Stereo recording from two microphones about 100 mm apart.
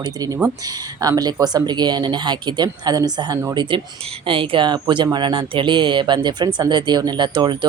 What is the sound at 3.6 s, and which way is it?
Speech, 55° right (ahead or behind).